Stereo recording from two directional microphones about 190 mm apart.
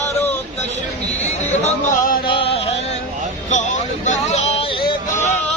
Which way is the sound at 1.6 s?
40° left (ahead or behind).